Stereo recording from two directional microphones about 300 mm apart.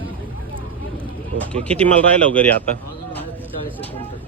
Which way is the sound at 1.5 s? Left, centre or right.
Centre.